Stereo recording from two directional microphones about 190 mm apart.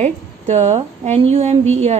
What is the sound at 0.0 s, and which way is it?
A woman's voice, 35° right (ahead or behind).